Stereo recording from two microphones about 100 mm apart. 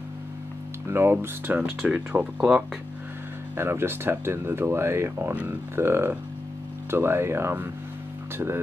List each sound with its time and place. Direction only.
0.8 s speech: 25° right (ahead or behind)
3.5 s speech: 25° right (ahead or behind)